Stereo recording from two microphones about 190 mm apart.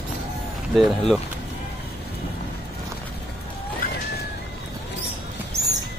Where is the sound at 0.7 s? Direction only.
Centre (ahead or behind).